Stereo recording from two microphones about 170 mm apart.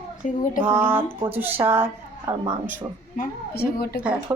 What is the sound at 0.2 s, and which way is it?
Child singing, 45° left (ahead or behind).